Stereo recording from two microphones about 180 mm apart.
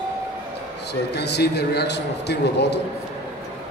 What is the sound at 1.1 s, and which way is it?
Speech, 65° left (ahead or behind).